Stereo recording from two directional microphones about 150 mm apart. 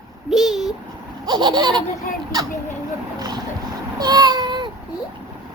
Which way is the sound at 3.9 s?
25° right (ahead or behind).